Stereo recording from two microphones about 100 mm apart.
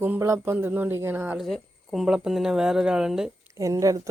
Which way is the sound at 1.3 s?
Centre (ahead or behind).